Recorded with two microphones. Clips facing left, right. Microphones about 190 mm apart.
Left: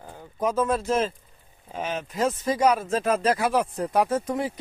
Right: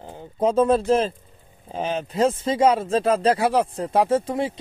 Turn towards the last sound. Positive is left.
turn(degrees=-25)  # may be behind; listen again after turning